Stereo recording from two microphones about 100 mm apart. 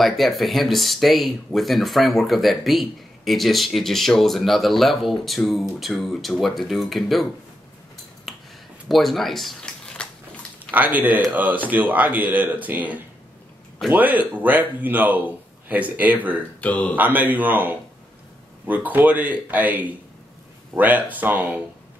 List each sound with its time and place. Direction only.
0.0 s speech: centre (ahead or behind)
8.3 s a sound: centre (ahead or behind)
10.7 s speech: 15° right (ahead or behind)
16.6 s speech: 15° left (ahead or behind)
16.9 s speech: 15° right (ahead or behind)
18.9 s speech: 15° right (ahead or behind)